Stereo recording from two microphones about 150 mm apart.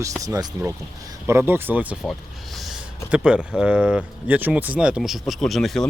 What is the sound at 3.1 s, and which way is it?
Speech, 5° right (ahead or behind).